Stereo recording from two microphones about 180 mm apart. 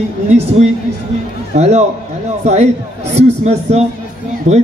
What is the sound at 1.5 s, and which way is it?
Speech, 40° right (ahead or behind).